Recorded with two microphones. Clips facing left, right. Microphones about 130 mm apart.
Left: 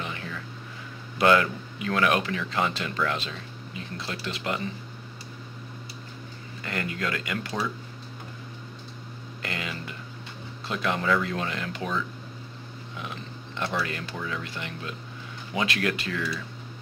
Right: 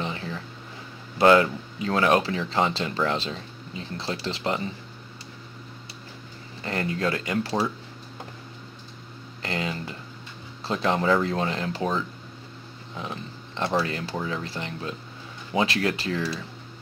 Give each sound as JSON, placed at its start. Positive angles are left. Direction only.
{"t": 0.0, "sound": "a sound", "side_deg": -30}
{"t": 1.1, "sound": "speech", "side_deg": -30}
{"t": 6.6, "sound": "speech", "side_deg": -30}
{"t": 9.4, "sound": "speech", "side_deg": -30}
{"t": 12.9, "sound": "a sound", "side_deg": -30}
{"t": 13.8, "sound": "speech", "side_deg": -30}